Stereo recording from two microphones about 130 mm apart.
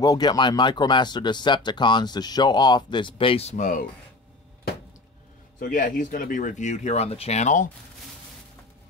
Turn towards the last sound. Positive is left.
turn(degrees=70)  # may be behind; listen again after turning